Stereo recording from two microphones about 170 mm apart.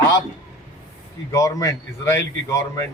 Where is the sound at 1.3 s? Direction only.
20° left (ahead or behind).